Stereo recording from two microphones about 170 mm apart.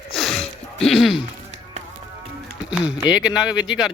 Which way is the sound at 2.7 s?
5° right (ahead or behind).